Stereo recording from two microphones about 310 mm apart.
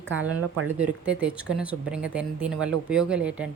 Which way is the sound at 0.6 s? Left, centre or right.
Centre.